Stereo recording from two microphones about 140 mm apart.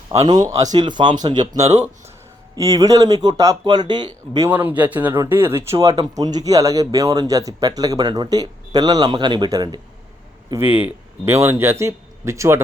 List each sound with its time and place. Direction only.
0.1 s speech: 25° right (ahead or behind)
4.4 s speech: 10° right (ahead or behind); by 9.8 s 30° right (ahead or behind)
10.6 s speech: 15° right (ahead or behind)